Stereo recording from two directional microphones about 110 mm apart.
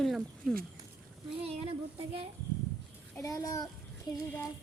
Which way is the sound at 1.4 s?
60° right (ahead or behind).